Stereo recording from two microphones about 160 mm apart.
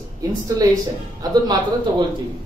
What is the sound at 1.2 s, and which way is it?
Speech, 25° right (ahead or behind).